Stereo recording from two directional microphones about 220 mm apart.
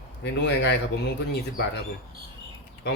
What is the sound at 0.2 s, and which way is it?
Speech, 50° left (ahead or behind).